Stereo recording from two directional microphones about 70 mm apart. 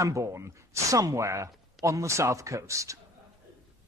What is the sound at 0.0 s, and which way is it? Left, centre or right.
Speech, right.